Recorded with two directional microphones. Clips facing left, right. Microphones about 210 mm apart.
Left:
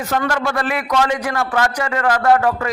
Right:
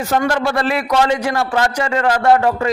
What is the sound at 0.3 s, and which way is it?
A man's voice, 25° right (ahead or behind).